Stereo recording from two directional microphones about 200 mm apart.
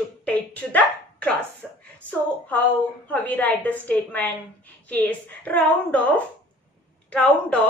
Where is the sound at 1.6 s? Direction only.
5° right (ahead or behind).